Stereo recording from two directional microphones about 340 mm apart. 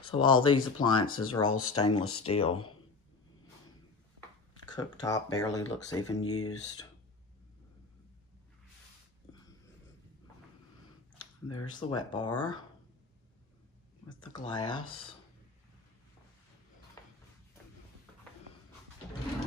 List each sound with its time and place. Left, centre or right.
0.1 s speech: centre
1.7 s speech: left
2.2 s speech: centre
4.6 s speech: centre
6.2 s speech: left
9.3 s wheeze: centre
11.4 s speech: centre
14.0 s speech: centre
17.0 s a sound: centre